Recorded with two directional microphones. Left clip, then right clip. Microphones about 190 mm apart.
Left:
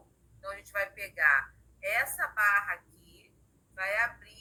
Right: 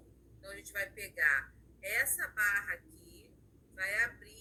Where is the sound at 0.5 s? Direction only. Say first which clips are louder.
Left 5 dB; 15° right (ahead or behind).